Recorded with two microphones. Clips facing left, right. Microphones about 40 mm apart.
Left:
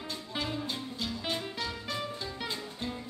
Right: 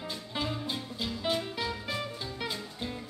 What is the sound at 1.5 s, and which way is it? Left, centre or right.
Music, centre.